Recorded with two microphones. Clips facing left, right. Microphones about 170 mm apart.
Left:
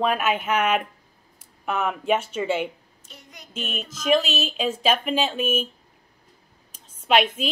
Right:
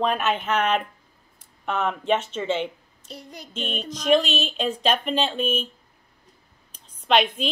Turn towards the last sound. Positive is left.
turn(degrees=5)  # may be behind; listen again after turning